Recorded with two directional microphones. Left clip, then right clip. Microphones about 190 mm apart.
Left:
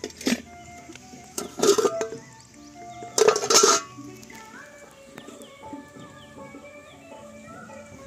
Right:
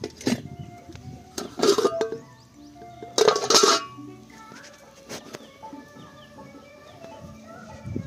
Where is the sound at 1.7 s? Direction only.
20° right (ahead or behind).